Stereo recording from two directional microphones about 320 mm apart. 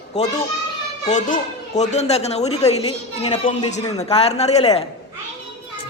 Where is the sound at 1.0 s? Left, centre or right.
Left.